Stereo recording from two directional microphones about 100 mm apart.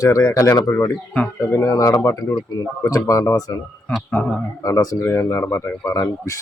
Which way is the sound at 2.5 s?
35° left (ahead or behind).